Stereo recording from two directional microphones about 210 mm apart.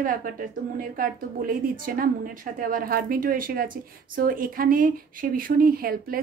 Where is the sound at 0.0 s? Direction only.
40° right (ahead or behind).